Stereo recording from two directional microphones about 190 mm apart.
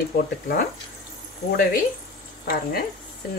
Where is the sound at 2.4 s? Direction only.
50° left (ahead or behind).